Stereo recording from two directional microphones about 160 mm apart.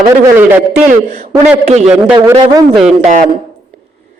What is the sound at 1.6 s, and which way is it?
Speech, 45° right (ahead or behind).